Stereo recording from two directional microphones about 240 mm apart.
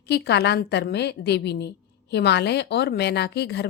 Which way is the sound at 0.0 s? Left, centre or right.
Left.